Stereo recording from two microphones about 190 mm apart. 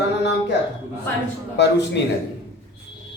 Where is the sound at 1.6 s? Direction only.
65° left (ahead or behind).